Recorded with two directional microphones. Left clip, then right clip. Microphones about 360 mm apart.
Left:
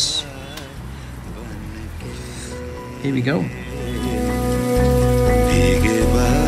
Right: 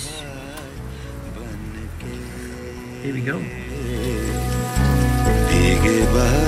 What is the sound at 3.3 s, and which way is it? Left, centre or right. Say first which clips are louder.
Music: left 4 dB; centre.